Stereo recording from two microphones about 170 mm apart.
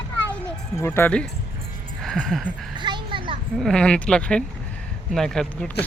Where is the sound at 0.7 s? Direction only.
15° left (ahead or behind).